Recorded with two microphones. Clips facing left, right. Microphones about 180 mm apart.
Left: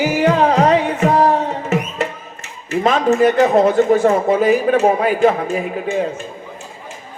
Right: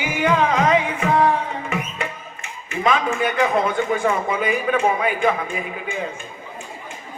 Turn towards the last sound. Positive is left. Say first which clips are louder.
# left 8 dB
turn(degrees=40)  # may be behind; listen again after turning